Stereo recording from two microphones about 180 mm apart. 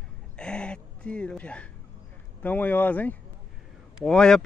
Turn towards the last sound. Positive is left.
turn(degrees=5)  # may be behind; listen again after turning